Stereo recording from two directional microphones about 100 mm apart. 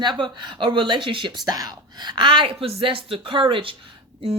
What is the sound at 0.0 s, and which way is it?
A woman's voice, 50° right (ahead or behind).